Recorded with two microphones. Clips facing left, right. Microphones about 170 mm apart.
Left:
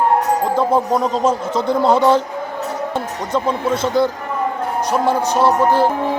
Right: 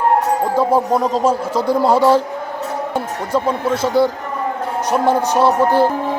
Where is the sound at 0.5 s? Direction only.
5° right (ahead or behind).